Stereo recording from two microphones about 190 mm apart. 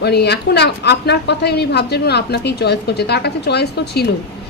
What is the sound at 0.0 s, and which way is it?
A woman's voice, 60° left (ahead or behind).